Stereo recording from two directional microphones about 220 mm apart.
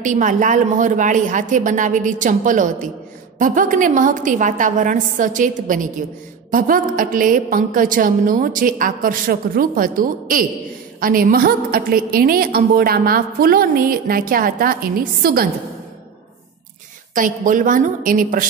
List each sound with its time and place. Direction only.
0.0 s a woman's voice: 35° right (ahead or behind)
17.1 s a woman's voice: 35° right (ahead or behind)